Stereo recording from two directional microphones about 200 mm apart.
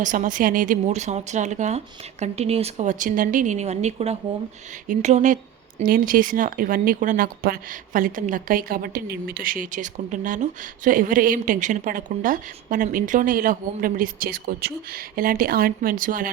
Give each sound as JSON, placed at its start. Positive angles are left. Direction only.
{"t": 0.0, "sound": "speech", "side_deg": -40}